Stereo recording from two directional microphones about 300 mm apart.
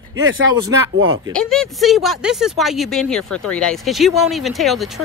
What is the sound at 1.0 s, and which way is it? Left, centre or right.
Speech, centre.